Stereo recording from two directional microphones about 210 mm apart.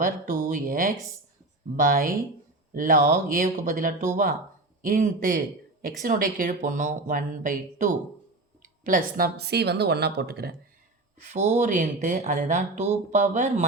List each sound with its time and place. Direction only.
0.0 s a woman's voice: 40° right (ahead or behind)
11.2 s speech: 35° right (ahead or behind)